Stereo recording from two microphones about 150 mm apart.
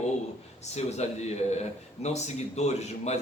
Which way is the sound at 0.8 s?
45° left (ahead or behind).